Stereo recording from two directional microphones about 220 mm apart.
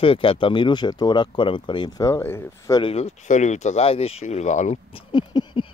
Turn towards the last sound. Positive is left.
turn(degrees=20)  # may be behind; listen again after turning